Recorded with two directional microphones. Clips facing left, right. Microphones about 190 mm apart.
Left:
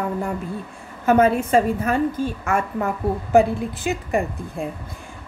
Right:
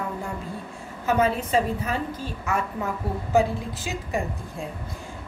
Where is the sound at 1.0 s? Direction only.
55° left (ahead or behind).